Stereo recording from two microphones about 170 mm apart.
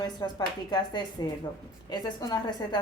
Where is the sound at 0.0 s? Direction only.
25° left (ahead or behind).